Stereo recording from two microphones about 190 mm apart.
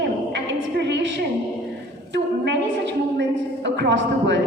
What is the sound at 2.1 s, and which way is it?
A woman's voice, 65° right (ahead or behind).